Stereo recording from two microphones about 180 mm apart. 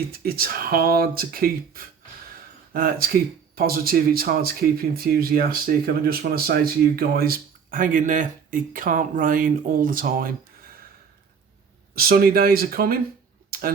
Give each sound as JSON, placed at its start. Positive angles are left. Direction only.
{"t": 0.1, "sound": "speech", "side_deg": -55}
{"t": 11.9, "sound": "speech", "side_deg": -55}
{"t": 13.5, "sound": "computer keyboard", "side_deg": -55}